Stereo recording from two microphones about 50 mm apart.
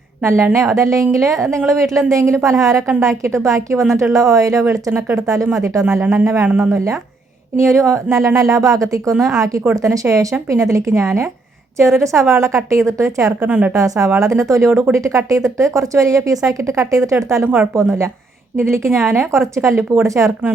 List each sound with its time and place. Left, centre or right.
0.2 s a woman's voice: right
0.5 s a woman's voice: right
4.7 s a woman's voice: right
5.2 s a woman's voice: right
6.0 s a woman's voice: right
7.6 s a woman's voice: right
9.1 s speech: centre
9.8 s a woman's voice: right
12.3 s a woman's voice: right
13.4 s a woman's voice: right
13.7 s a woman's voice: right
17.4 s a woman's voice: right
17.7 s a woman's voice: right
20.1 s a woman's voice: right